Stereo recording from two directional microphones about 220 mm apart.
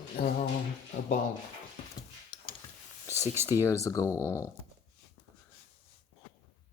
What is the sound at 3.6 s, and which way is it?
Speech, 15° left (ahead or behind).